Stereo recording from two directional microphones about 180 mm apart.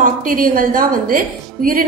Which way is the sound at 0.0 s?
50° right (ahead or behind).